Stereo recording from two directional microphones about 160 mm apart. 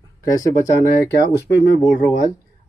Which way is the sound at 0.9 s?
90° left.